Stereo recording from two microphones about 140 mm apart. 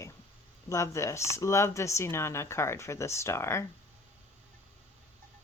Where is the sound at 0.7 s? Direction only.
20° left (ahead or behind).